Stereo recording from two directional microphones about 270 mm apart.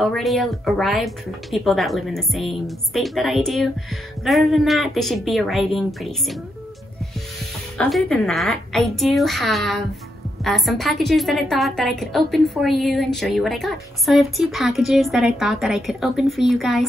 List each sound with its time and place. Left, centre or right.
0.0 s speech: centre
7.7 s speech: centre